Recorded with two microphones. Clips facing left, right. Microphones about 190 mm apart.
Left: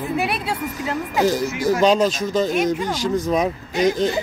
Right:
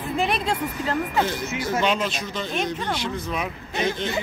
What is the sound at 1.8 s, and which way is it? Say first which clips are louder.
Speech: left 7 dB; 40° left (ahead or behind).